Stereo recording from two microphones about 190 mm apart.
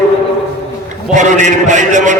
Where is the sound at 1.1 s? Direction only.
40° right (ahead or behind).